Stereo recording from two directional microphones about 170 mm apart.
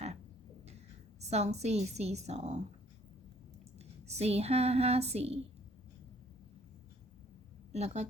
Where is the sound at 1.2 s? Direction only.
40° right (ahead or behind).